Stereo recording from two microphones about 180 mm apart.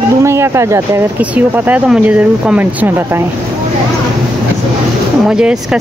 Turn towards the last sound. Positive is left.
turn(degrees=-5)  # may be behind; listen again after turning